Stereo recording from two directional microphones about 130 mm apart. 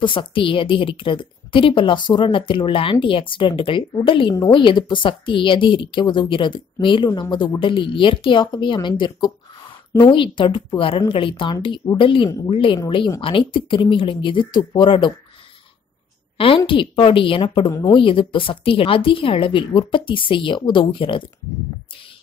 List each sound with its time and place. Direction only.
0.0 s a woman's voice: 40° left (ahead or behind)
16.3 s a woman's voice: 45° left (ahead or behind)